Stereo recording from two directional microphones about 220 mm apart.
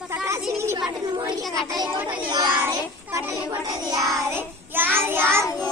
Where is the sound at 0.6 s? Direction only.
10° right (ahead or behind).